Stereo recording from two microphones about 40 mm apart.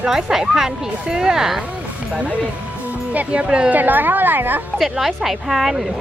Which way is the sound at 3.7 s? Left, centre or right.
Right.